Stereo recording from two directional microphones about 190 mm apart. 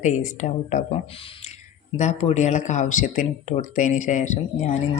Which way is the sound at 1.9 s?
35° left (ahead or behind).